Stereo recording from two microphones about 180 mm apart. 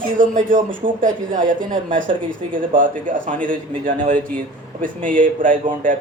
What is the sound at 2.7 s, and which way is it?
Speech, 50° right (ahead or behind).